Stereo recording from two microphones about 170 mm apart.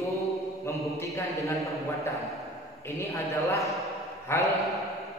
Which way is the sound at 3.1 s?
20° left (ahead or behind).